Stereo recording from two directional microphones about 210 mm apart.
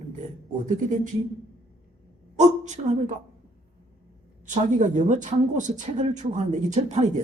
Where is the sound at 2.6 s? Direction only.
35° right (ahead or behind).